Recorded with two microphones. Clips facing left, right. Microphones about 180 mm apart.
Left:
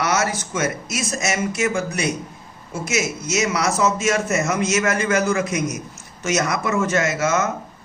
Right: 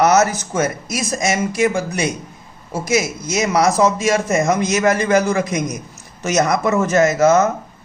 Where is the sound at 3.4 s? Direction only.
35° right (ahead or behind).